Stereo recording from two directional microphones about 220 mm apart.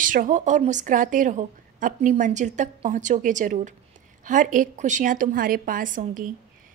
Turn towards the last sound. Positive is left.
turn(degrees=-35)  # may be behind; listen again after turning